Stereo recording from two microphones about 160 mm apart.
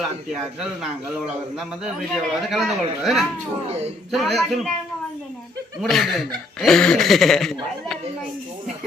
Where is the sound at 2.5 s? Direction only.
Centre (ahead or behind).